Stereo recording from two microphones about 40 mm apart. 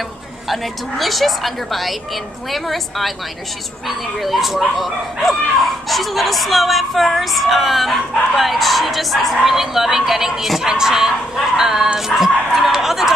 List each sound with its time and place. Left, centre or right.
0.5 s speech: centre
4.2 s speech: centre